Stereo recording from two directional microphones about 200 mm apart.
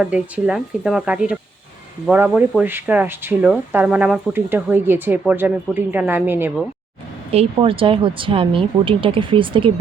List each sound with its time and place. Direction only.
0.0 s speech: 5° right (ahead or behind)
7.3 s speech: 30° right (ahead or behind)